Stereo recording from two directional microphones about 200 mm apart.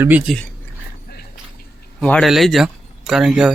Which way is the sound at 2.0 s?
5° left (ahead or behind).